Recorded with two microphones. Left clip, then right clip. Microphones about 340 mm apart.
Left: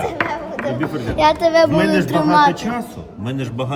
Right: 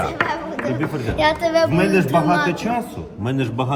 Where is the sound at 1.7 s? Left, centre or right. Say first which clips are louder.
Left 2 dB; left.